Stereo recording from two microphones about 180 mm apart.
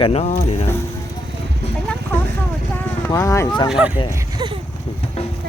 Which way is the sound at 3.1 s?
15° left (ahead or behind).